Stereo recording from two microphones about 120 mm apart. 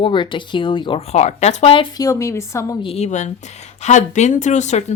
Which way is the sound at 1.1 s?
70° left (ahead or behind).